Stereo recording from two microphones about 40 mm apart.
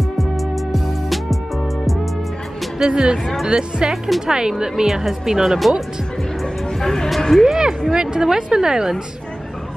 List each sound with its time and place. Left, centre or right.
0.2 s music: centre
2.8 s speech: centre
6.4 s speech: centre
7.4 s a sound: centre
7.9 s speech: centre